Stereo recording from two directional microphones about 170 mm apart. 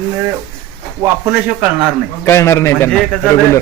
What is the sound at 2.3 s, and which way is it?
Speech, 15° left (ahead or behind).